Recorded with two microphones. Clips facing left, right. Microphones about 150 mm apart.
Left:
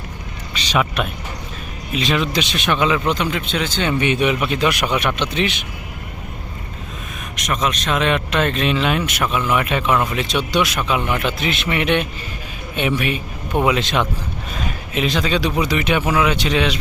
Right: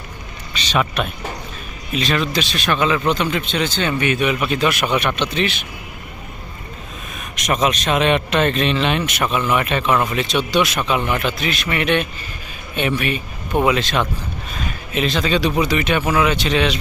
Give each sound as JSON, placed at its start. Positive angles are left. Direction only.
{"t": 0.6, "sound": "speech", "side_deg": 10}
{"t": 4.0, "sound": "a man's voice", "side_deg": 25}
{"t": 4.4, "sound": "speech", "side_deg": 15}
{"t": 7.4, "sound": "speech", "side_deg": -10}